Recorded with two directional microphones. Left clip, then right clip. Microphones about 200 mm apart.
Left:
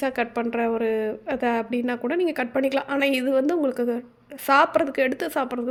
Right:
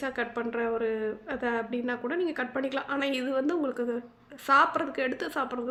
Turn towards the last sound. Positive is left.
turn(degrees=35)  # may be behind; listen again after turning